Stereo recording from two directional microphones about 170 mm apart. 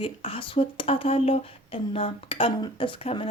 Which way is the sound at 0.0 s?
30° left (ahead or behind).